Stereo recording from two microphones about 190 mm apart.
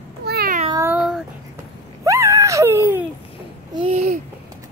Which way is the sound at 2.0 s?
15° right (ahead or behind).